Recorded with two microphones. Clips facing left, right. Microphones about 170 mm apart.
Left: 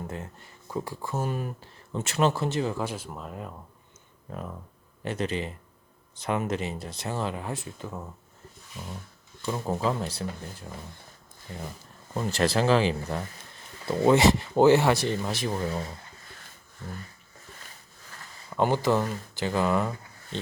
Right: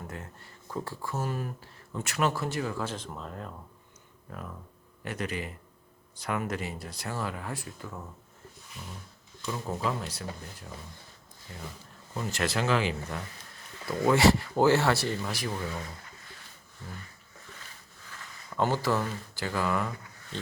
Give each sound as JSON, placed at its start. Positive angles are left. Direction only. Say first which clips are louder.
{"t": 0.7, "sound": "speech", "louder": "left 3 dB", "side_deg": 15}
{"t": 2.8, "sound": "speech", "louder": "left 2 dB", "side_deg": 10}
{"t": 4.3, "sound": "speech", "louder": "left 4 dB", "side_deg": 25}
{"t": 9.5, "sound": "speech", "louder": "left 4 dB", "side_deg": 30}
{"t": 12.1, "sound": "speech", "louder": "left 5 dB", "side_deg": 35}
{"t": 15.5, "sound": "speech", "louder": "left 5 dB", "side_deg": 35}
{"t": 18.5, "sound": "speech", "louder": "left 4 dB", "side_deg": 20}